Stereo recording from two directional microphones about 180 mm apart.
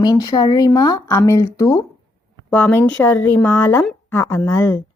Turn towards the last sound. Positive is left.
turn(degrees=15)  # may be behind; listen again after turning